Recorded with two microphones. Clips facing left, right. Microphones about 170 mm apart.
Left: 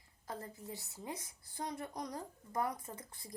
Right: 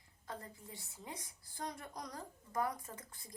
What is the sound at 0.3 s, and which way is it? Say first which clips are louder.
Speech: left 4 dB; 25° left (ahead or behind).